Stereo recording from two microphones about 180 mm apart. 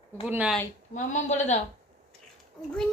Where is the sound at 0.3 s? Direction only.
10° right (ahead or behind).